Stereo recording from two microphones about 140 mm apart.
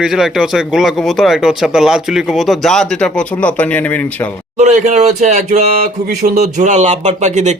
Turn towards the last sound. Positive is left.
turn(degrees=-55)  # may be behind; listen again after turning